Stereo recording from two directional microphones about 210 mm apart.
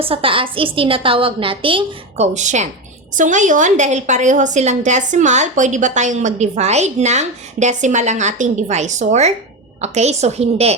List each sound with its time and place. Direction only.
0.0 s a woman's voice: 25° right (ahead or behind)